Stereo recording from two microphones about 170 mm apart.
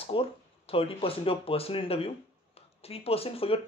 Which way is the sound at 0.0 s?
35° left (ahead or behind).